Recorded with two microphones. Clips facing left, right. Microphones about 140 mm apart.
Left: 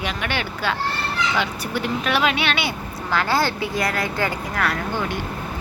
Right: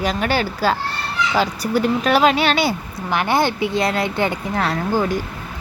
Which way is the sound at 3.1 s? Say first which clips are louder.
Right 3 dB; 20° right (ahead or behind).